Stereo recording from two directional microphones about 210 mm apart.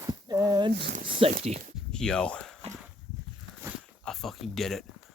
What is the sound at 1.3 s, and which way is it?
Speech, 35° right (ahead or behind).